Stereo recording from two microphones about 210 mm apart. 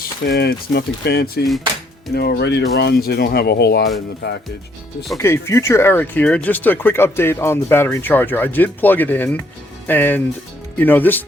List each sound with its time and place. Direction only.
0.0 s speech: 50° left (ahead or behind)
5.1 s speech: 15° left (ahead or behind)